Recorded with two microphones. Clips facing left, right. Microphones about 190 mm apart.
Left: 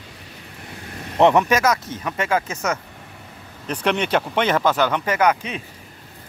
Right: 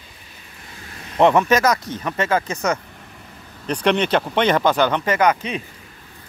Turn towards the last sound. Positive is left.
turn(degrees=5)  # may be behind; listen again after turning